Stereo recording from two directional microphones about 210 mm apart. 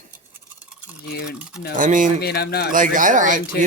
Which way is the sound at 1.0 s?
50° left (ahead or behind).